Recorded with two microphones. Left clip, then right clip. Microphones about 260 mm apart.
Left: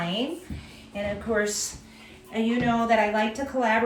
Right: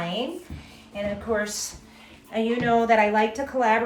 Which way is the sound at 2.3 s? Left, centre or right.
Right.